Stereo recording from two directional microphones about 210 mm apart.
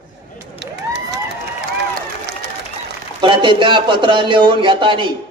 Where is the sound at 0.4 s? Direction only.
55° right (ahead or behind).